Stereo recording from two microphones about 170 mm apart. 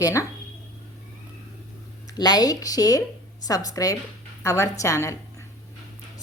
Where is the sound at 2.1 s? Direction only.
20° left (ahead or behind).